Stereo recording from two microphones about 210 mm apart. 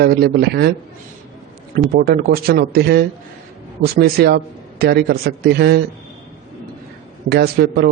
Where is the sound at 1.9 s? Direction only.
45° right (ahead or behind).